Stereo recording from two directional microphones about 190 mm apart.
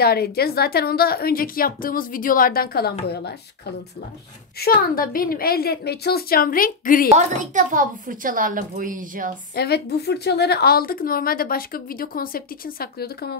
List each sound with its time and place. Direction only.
0.0 s a woman's voice: 55° left (ahead or behind)
4.6 s a woman's voice: 50° left (ahead or behind)
7.1 s speech: 40° right (ahead or behind)
9.6 s a woman's voice: 60° left (ahead or behind)